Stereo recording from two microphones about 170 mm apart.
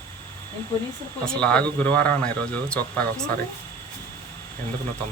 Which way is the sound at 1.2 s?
5° left (ahead or behind).